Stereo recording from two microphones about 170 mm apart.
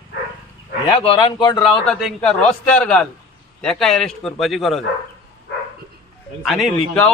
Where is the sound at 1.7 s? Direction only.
5° left (ahead or behind).